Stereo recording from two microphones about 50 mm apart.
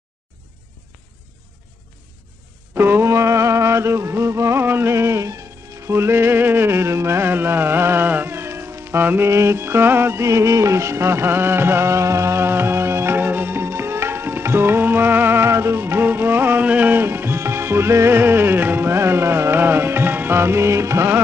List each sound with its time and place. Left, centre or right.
2.7 s speech: right
3.1 s music: right
4.6 s music: right
5.9 s music: right
9.0 s music: right
9.3 s music: right
10.2 s music: right
16.6 s music: right
16.9 s music: right
18.9 s music: right
20.3 s music: right